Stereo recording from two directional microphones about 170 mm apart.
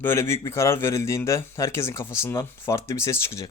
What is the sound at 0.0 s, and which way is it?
Speech, 15° left (ahead or behind).